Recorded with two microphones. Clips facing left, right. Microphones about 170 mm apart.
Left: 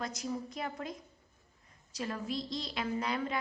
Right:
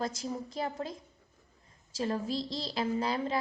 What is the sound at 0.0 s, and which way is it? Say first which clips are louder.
A woman's voice: right 2 dB; 30° right (ahead or behind).